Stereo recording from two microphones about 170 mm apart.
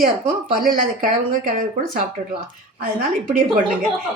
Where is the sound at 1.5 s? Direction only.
55° right (ahead or behind).